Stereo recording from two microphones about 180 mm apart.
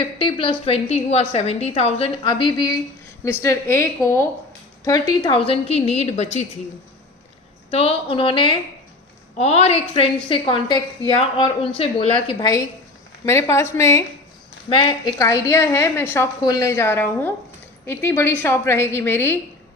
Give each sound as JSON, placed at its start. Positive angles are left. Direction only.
{"t": 0.0, "sound": "a woman's voice", "side_deg": 30}
{"t": 7.7, "sound": "a woman's voice", "side_deg": 35}
{"t": 14.7, "sound": "a woman's voice", "side_deg": 25}